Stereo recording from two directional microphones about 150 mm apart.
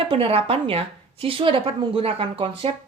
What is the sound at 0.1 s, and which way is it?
A woman's voice, 40° right (ahead or behind).